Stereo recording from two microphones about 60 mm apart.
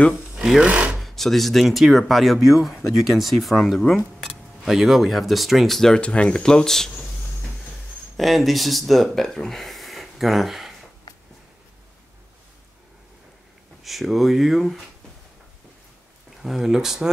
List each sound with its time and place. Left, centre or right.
0.6 s speech: right
1.0 s speech: centre
5.9 s speech: centre
8.2 s speech: centre
13.8 s speech: centre
16.4 s speech: centre